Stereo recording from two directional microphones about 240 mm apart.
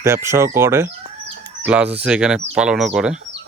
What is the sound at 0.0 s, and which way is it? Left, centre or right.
Speech, centre.